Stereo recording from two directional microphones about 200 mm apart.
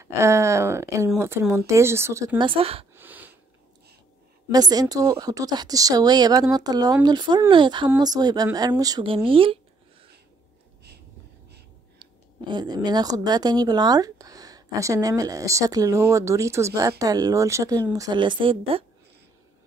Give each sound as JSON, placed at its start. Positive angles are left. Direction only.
{"t": 0.0, "sound": "speech", "side_deg": -15}
{"t": 2.9, "sound": "a sound", "side_deg": -10}
{"t": 4.5, "sound": "a woman's voice", "side_deg": -20}
{"t": 12.0, "sound": "a woman's voice", "side_deg": -20}